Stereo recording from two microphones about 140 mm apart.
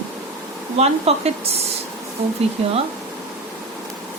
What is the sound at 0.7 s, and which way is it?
Speech, 50° right (ahead or behind).